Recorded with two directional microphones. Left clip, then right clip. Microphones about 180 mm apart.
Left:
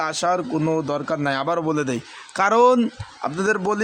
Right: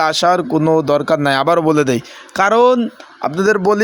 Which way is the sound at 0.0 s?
30° right (ahead or behind).